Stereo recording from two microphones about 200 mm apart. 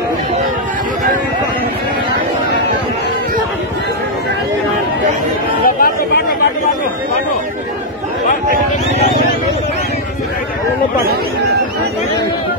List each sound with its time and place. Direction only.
5.8 s chatter: 50° left (ahead or behind)